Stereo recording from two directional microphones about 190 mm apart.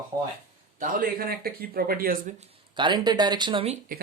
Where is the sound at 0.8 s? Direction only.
45° right (ahead or behind).